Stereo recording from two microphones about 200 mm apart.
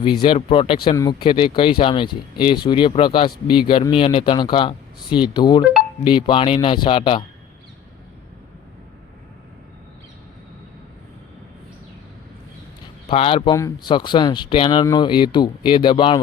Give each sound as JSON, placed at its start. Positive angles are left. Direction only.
{"t": 0.2, "sound": "speech", "side_deg": 25}
{"t": 13.1, "sound": "speech", "side_deg": 25}